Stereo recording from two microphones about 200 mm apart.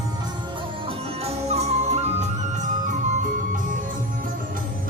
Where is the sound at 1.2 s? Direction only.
30° right (ahead or behind).